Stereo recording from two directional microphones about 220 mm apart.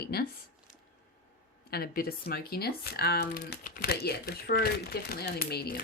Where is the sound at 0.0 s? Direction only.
45° left (ahead or behind).